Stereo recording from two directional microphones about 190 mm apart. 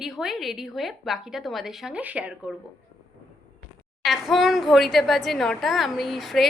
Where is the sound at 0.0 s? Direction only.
Centre (ahead or behind).